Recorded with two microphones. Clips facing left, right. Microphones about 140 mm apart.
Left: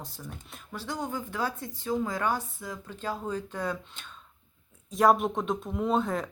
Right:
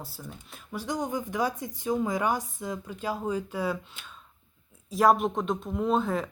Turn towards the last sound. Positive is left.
turn(degrees=0)  # may be behind; listen again after turning